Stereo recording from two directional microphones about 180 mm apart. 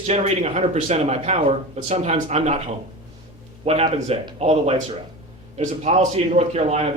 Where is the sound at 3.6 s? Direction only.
35° right (ahead or behind).